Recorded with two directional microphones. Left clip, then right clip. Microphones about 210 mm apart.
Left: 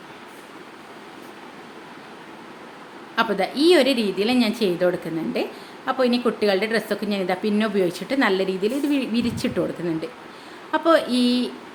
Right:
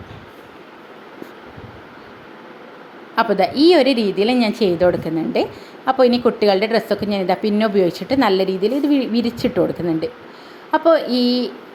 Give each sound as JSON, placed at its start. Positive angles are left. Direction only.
{"t": 3.2, "sound": "a woman's voice", "side_deg": -20}